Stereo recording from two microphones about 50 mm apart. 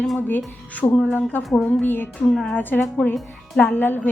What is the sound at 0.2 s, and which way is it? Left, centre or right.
Speech, left.